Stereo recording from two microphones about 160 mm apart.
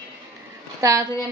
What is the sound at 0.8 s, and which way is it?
Speech, 20° right (ahead or behind).